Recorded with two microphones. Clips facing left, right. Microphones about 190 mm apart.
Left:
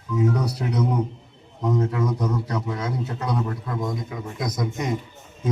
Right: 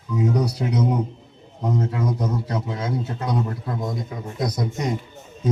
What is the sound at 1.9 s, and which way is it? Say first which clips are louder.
A man's voice: even; 35° right (ahead or behind).